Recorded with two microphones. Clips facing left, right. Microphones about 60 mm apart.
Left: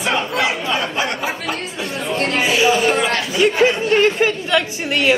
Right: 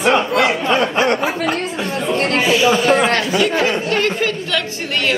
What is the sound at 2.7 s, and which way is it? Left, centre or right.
Speech, right.